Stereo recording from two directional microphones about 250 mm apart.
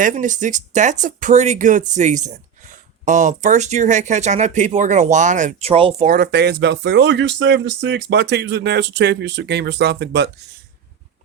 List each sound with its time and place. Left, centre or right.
0.0 s speech: right
6.1 s speech: right